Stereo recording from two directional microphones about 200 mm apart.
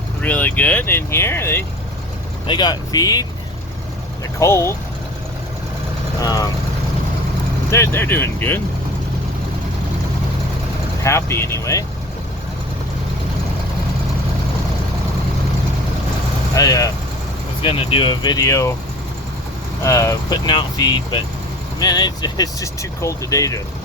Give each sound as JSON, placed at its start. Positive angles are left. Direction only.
{"t": 0.2, "sound": "speech", "side_deg": 10}
{"t": 4.4, "sound": "speech", "side_deg": 15}
{"t": 6.2, "sound": "speech", "side_deg": 15}
{"t": 7.7, "sound": "speech", "side_deg": 10}
{"t": 11.0, "sound": "speech", "side_deg": 15}
{"t": 16.6, "sound": "speech", "side_deg": 15}
{"t": 19.8, "sound": "speech", "side_deg": 15}